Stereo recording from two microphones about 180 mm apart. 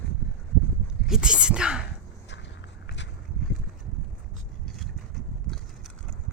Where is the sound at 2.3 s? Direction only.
80° left.